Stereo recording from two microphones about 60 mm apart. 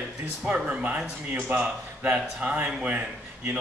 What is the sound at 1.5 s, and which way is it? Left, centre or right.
Speech, right.